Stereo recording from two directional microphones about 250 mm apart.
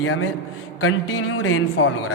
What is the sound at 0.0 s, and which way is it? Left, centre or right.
A man's voice, left.